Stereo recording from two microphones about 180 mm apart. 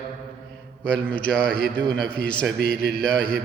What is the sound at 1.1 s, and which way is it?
Mantra, 5° left (ahead or behind).